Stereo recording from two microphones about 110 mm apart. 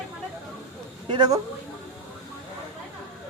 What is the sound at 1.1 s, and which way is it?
Speech, 40° right (ahead or behind).